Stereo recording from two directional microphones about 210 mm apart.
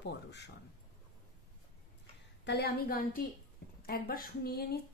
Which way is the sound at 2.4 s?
50° left (ahead or behind).